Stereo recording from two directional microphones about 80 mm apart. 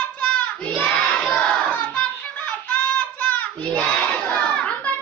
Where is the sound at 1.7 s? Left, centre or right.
Left.